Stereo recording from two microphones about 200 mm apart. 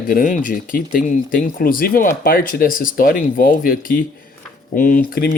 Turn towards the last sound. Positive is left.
turn(degrees=45)  # may be behind; listen again after turning